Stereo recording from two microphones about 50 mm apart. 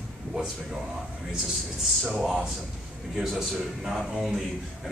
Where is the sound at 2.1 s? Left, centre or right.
Centre.